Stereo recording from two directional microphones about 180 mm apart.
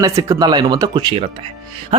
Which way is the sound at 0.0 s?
20° right (ahead or behind).